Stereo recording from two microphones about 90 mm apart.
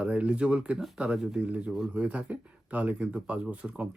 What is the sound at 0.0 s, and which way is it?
Speech, 15° right (ahead or behind).